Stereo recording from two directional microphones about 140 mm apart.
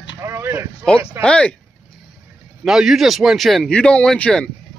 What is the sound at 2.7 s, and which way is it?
Speech, 5° right (ahead or behind).